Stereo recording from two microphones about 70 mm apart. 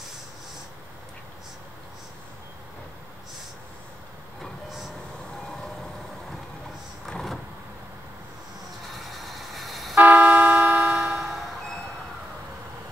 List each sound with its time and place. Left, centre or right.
4.4 s vehicle: centre
7.1 s vehicle: centre
9.0 s vehicle: centre
9.9 s vehicle: right